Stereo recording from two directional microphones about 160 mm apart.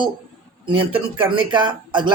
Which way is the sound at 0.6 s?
35° right (ahead or behind).